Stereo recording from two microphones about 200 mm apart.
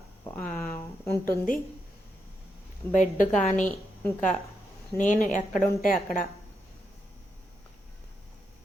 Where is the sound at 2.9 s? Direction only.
40° left (ahead or behind).